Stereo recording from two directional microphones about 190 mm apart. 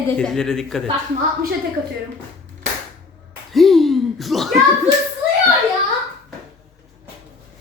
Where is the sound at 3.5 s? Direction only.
Centre (ahead or behind).